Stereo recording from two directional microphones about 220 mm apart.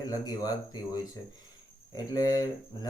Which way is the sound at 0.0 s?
15° left (ahead or behind).